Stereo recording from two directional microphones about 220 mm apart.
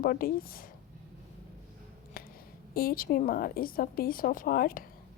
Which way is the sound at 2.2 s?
40° left (ahead or behind).